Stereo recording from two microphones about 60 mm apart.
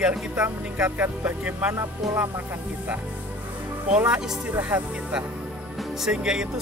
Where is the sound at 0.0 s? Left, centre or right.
Centre.